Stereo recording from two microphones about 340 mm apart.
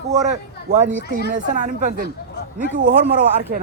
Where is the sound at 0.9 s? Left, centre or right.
Right.